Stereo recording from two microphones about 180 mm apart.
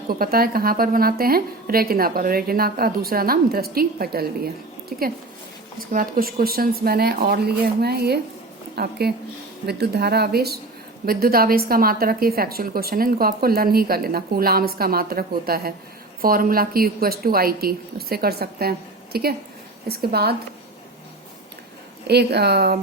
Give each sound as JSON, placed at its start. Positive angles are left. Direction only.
{"t": 0.1, "sound": "a woman's voice", "side_deg": -55}
{"t": 22.0, "sound": "a woman's voice", "side_deg": -65}